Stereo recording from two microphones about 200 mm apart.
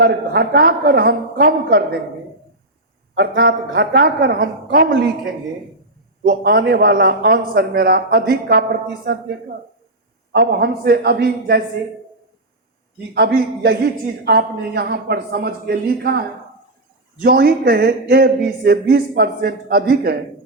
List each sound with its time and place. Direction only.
0.0 s speech: 50° right (ahead or behind)
3.2 s speech: 50° right (ahead or behind)
10.3 s speech: 50° right (ahead or behind)
13.1 s speech: 50° right (ahead or behind)
17.2 s speech: 50° right (ahead or behind)